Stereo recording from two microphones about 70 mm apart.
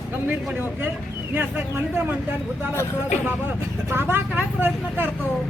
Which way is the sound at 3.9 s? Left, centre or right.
Right.